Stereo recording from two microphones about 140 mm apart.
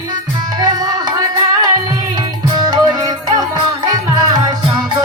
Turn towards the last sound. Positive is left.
turn(degrees=-30)  # may be behind; listen again after turning